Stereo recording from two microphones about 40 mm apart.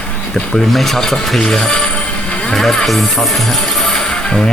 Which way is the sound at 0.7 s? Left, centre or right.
Centre.